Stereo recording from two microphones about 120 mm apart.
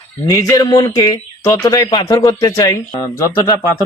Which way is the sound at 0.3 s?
30° left (ahead or behind).